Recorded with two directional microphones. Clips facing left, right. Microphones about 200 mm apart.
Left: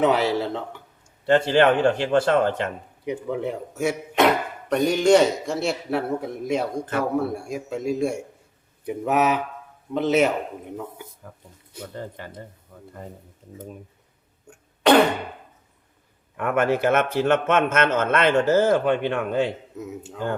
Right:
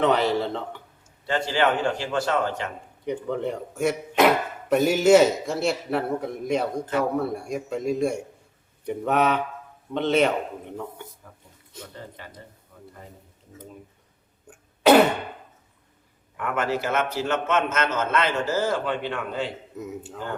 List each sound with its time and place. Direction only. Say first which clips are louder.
0.0 s a man's voice: left 1 dB; 5° left (ahead or behind)
1.3 s speech: left 6 dB; 55° left (ahead or behind)
3.0 s a man's voice: even; 5° left (ahead or behind)
12.7 s a sound: right 1 dB; 50° left (ahead or behind)
14.4 s cough: right 1 dB; 5° right (ahead or behind)
16.4 s a man's voice: left 5 dB; 55° left (ahead or behind)
19.7 s a man's voice: even; centre (ahead or behind)